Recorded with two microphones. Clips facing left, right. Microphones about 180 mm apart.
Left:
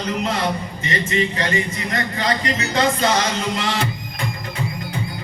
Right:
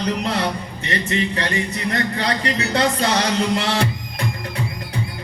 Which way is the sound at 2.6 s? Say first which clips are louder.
Even; 65° right (ahead or behind).